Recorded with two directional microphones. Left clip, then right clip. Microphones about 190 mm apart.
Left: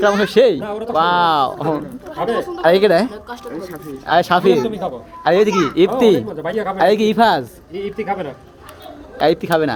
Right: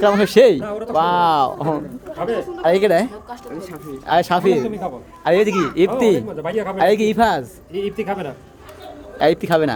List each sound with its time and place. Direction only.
0.0 s speech: 15° right (ahead or behind)
0.6 s speech: 25° left (ahead or behind)
0.9 s speech: 10° right (ahead or behind)
2.1 s speech: 55° left (ahead or behind)
2.6 s speech: 10° left (ahead or behind)
4.5 s a man's voice: 55° left (ahead or behind)
5.2 s speech: centre (ahead or behind)
7.7 s speech: 30° right (ahead or behind)
9.1 s speech: 5° right (ahead or behind)